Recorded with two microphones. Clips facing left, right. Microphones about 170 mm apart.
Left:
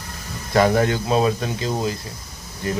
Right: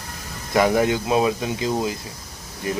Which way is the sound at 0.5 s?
15° right (ahead or behind).